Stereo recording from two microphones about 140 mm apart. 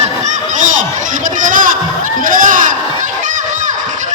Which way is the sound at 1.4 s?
70° right (ahead or behind).